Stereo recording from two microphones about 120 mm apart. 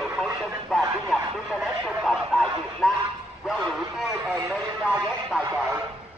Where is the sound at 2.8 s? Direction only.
5° right (ahead or behind).